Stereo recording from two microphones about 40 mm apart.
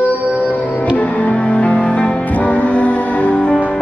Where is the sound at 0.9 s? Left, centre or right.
Left.